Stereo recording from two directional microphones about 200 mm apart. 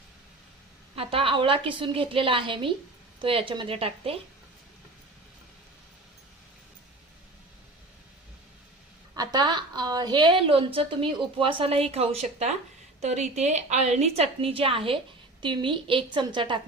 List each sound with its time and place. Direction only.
0.9 s a woman's voice: 25° right (ahead or behind)
9.1 s a woman's voice: 20° right (ahead or behind)